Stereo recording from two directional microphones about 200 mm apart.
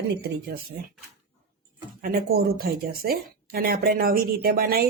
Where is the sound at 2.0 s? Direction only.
50° right (ahead or behind).